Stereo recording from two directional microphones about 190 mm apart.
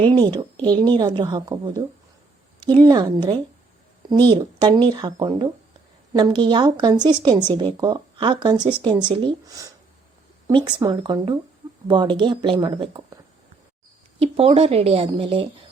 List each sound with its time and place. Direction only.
0.0 s speech: 25° right (ahead or behind)
14.2 s a woman's voice: 30° right (ahead or behind)